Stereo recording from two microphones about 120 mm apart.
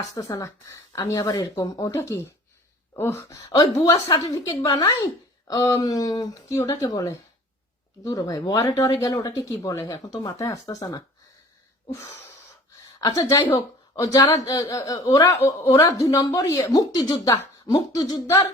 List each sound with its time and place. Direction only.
0.0 s speech: 25° left (ahead or behind)